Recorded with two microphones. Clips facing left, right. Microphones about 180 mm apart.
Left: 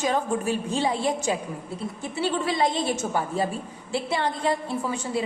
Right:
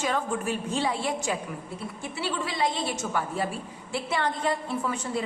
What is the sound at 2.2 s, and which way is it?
Speech, 50° left (ahead or behind).